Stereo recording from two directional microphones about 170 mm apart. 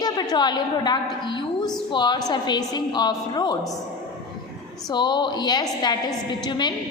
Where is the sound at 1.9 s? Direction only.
25° left (ahead or behind).